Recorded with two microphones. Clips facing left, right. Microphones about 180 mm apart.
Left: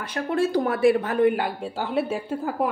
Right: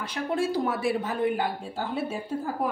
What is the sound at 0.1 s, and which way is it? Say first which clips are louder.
Speech: left 5 dB; 60° left (ahead or behind).